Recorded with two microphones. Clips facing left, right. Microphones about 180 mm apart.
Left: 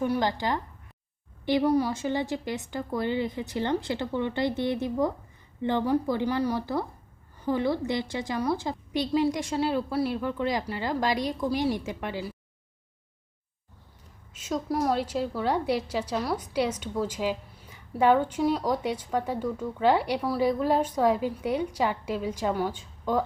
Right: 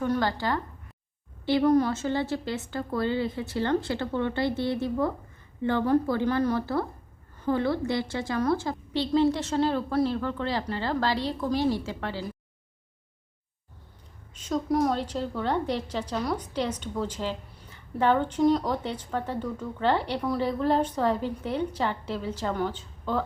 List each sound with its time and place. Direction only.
0.0 s a woman's voice: 15° left (ahead or behind)
14.3 s a woman's voice: 10° left (ahead or behind)